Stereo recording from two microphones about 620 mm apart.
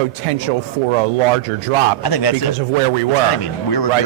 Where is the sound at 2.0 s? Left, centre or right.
Left.